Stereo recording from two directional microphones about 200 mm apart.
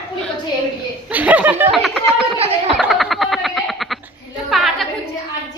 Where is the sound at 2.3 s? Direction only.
30° right (ahead or behind).